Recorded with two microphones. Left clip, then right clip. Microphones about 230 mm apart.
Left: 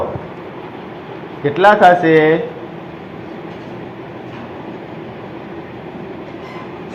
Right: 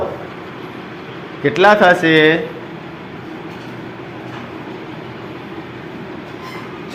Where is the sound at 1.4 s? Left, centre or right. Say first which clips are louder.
Left 1 dB; right.